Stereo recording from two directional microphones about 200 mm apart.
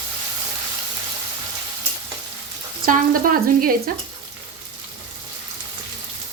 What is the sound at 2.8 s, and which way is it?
Frying, 45° right (ahead or behind).